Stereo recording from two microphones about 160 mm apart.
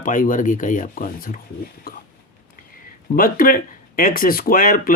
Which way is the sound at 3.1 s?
65° left (ahead or behind).